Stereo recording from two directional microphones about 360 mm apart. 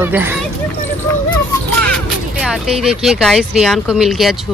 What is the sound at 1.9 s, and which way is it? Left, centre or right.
Music, centre.